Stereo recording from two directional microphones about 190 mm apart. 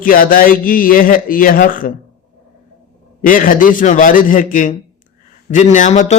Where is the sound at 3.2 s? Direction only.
45° left (ahead or behind).